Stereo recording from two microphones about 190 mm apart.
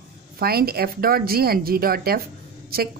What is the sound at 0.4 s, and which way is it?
A woman's voice, 55° right (ahead or behind).